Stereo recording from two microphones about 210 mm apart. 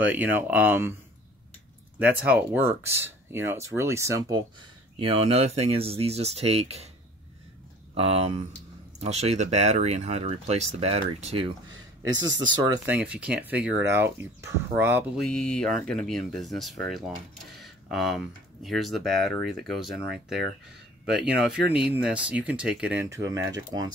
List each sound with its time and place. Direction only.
0.0 s speech: 10° right (ahead or behind)
2.0 s speech: 10° right (ahead or behind)
4.9 s speech: 25° right (ahead or behind)
7.9 s speech: 30° right (ahead or behind)
12.6 s speech: 20° right (ahead or behind)
12.9 s speech: 5° right (ahead or behind)
15.1 s speech: 5° left (ahead or behind); by 23.9 s 15° right (ahead or behind)